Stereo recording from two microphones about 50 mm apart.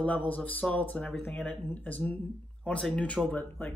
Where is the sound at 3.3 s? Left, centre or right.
Left.